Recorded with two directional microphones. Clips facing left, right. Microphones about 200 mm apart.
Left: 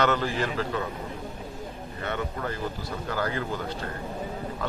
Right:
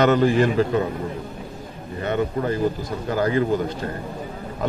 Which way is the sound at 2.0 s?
20° right (ahead or behind).